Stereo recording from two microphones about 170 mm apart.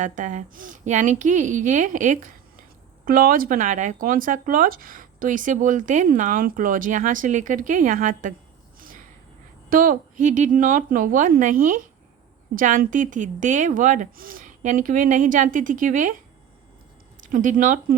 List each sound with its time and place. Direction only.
0.0 s speech: 45° right (ahead or behind)
9.6 s speech: 55° right (ahead or behind)